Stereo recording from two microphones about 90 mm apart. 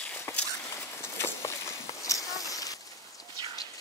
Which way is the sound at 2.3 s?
40° left (ahead or behind).